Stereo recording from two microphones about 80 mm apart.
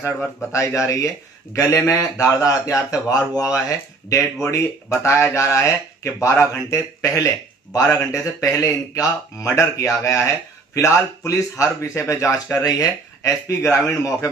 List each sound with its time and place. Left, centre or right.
0.0 s speech: left
6.5 s speech: left
12.6 s speech: left